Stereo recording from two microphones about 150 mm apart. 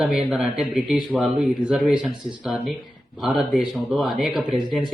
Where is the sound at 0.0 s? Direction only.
5° right (ahead or behind).